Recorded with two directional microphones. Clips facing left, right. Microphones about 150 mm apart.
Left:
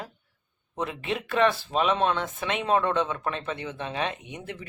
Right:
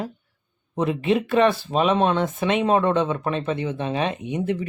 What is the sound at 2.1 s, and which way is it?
Speech, 25° right (ahead or behind).